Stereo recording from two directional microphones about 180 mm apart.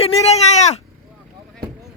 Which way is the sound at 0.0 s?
40° left (ahead or behind).